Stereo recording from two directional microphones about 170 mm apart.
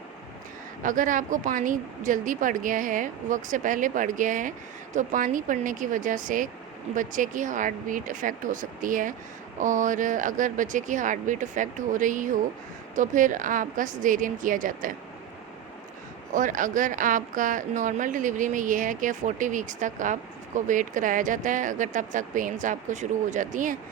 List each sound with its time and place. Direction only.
0.8 s speech: 50° right (ahead or behind)
16.3 s speech: 50° right (ahead or behind)